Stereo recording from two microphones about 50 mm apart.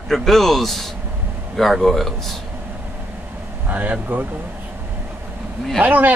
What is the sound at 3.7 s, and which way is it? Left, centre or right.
Speech, right.